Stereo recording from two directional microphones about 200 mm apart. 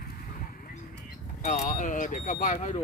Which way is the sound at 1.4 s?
35° left (ahead or behind).